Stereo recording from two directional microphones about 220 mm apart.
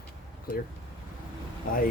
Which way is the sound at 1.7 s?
40° left (ahead or behind).